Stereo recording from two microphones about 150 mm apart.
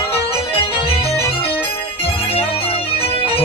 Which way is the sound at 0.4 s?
40° left (ahead or behind).